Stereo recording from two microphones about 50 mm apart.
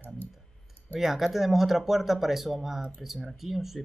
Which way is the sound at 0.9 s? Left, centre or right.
Centre.